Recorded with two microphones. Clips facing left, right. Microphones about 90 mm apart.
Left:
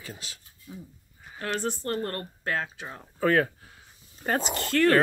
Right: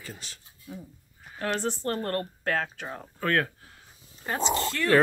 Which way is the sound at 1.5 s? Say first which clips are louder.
Even; 35° right (ahead or behind).